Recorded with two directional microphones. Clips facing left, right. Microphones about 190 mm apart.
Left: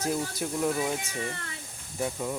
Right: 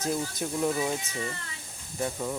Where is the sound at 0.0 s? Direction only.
10° left (ahead or behind).